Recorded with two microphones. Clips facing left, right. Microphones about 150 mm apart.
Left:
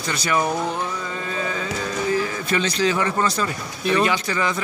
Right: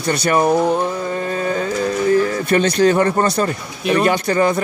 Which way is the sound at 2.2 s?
50° right (ahead or behind).